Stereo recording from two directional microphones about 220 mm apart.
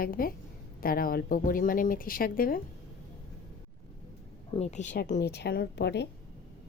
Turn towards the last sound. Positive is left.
turn(degrees=50)  # may be behind; listen again after turning